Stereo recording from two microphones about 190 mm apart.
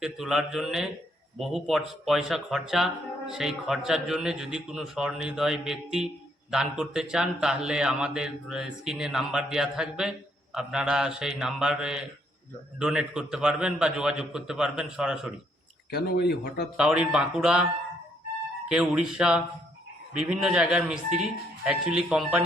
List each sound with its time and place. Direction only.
0.0 s a man's voice: 5° right (ahead or behind)
15.9 s speech: 60° left (ahead or behind)
16.7 s a man's voice: 5° right (ahead or behind)
18.7 s a man's voice: 5° right (ahead or behind)